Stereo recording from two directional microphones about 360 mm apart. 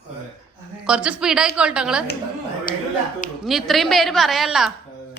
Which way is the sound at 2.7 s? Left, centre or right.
Left.